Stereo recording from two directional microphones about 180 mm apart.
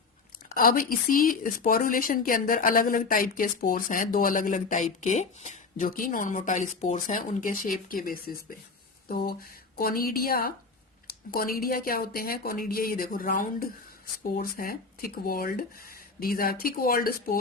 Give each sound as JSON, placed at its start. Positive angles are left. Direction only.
{"t": 0.4, "sound": "speech", "side_deg": 50}
{"t": 9.0, "sound": "a sound", "side_deg": 55}
{"t": 9.7, "sound": "speech", "side_deg": 55}